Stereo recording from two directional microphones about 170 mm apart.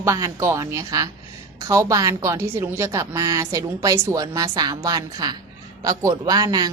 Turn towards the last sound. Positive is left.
turn(degrees=-20)  # may be behind; listen again after turning